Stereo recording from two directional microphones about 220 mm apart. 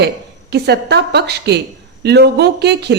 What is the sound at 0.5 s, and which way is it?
A woman's voice, 50° right (ahead or behind).